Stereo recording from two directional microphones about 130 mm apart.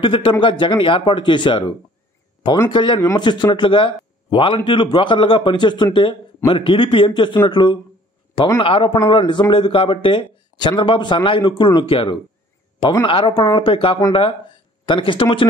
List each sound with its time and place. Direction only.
0.0 s speech: 40° left (ahead or behind)
2.7 s speech: 40° left (ahead or behind)